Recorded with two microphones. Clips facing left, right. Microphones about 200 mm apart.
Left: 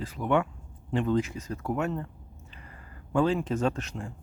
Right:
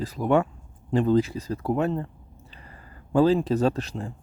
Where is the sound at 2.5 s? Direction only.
30° right (ahead or behind).